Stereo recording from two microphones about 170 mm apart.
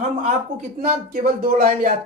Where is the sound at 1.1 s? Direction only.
60° right (ahead or behind).